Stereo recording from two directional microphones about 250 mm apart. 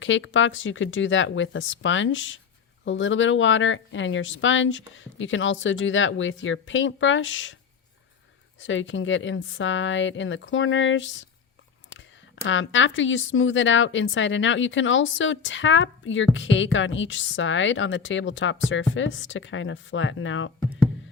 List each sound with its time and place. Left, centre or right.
0.0 s speech: left
8.6 s speech: left
12.5 s speech: left